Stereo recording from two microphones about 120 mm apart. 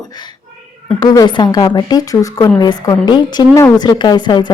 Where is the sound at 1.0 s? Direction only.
35° left (ahead or behind).